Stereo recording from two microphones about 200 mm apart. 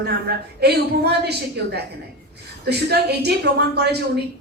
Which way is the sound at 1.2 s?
55° right (ahead or behind).